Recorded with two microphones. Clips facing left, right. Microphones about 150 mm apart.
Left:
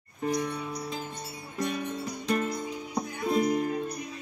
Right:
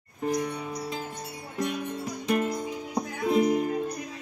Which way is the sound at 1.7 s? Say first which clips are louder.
Right 1 dB; 15° right (ahead or behind).